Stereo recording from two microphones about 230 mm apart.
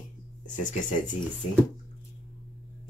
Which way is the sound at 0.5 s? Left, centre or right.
Left.